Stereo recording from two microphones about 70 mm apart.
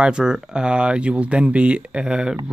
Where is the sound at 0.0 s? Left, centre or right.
Centre.